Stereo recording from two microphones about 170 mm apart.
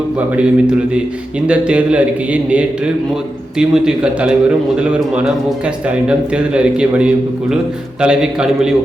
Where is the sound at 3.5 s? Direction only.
5° right (ahead or behind).